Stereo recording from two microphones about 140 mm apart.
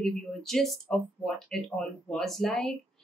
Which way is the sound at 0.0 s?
5° left (ahead or behind).